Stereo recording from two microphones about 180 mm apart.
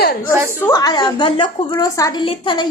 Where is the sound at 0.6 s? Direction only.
20° left (ahead or behind).